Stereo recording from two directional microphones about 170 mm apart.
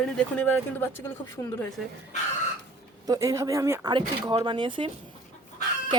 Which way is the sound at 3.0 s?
20° right (ahead or behind).